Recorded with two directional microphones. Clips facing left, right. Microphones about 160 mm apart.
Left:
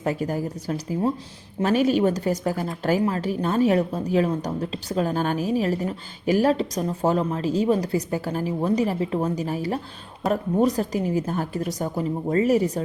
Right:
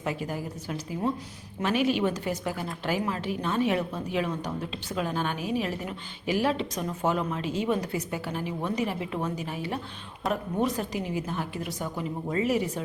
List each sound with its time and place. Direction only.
0.0 s speech: 40° left (ahead or behind)